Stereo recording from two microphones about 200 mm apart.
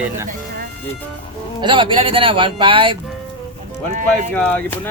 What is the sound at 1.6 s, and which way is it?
Speech, 25° right (ahead or behind).